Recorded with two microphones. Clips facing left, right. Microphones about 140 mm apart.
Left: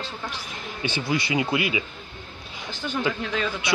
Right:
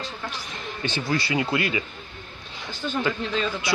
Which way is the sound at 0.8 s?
15° left (ahead or behind).